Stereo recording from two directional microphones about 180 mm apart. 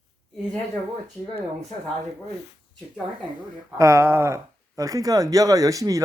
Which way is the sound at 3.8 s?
15° right (ahead or behind).